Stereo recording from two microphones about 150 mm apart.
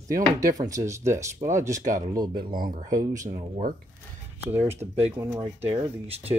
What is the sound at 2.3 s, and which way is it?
Speech, 70° right (ahead or behind).